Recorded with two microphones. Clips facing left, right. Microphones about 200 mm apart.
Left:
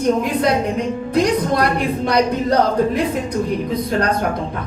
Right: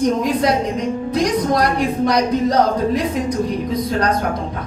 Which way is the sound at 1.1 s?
55° left (ahead or behind).